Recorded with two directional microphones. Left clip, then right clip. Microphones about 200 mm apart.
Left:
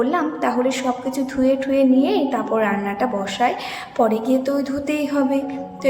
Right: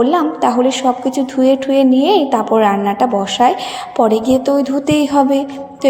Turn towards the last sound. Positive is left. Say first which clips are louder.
# right 8 dB
turn(degrees=-25)  # may be behind; listen again after turning